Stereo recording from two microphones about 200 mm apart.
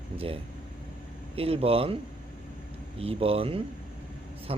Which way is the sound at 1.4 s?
30° right (ahead or behind).